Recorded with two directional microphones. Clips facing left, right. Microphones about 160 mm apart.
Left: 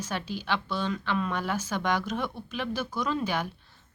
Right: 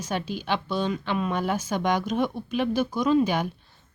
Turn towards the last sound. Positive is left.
turn(degrees=-15)  # may be behind; listen again after turning